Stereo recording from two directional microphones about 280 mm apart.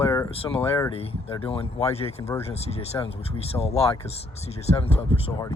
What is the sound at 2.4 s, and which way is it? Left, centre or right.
Speech, left.